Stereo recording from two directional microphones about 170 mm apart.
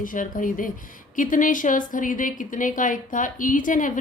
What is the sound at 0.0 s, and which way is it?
A woman's voice, 50° left (ahead or behind).